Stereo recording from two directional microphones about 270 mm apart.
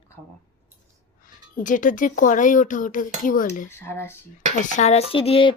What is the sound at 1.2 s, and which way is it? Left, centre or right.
Speech, left.